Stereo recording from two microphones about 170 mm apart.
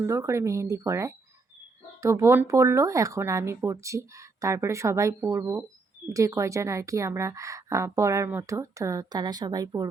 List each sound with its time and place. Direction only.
0.0 s speech: 15° right (ahead or behind)